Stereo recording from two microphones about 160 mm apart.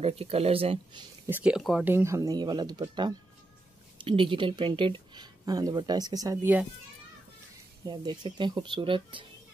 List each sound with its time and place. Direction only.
0.0 s speech: 40° right (ahead or behind)
1.2 s speech: 10° right (ahead or behind)
7.8 s speech: 30° right (ahead or behind)